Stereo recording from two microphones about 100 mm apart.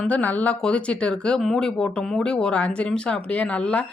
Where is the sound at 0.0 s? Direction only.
15° left (ahead or behind).